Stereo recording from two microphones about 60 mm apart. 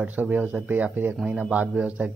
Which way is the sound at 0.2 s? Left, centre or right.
Right.